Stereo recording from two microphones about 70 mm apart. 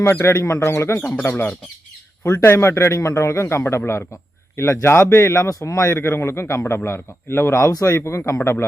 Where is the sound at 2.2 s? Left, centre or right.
Left.